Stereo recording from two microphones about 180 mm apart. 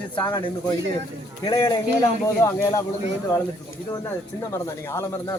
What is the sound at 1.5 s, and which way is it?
Speech, 25° left (ahead or behind).